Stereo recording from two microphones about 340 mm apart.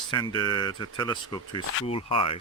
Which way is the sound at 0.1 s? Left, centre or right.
Centre.